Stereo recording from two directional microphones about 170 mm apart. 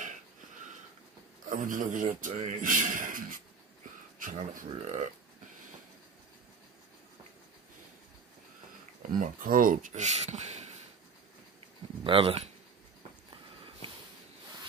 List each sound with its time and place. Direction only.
1.5 s a man's voice: 50° right (ahead or behind)
9.2 s a man's voice: 55° right (ahead or behind)
12.0 s speech: 30° right (ahead or behind)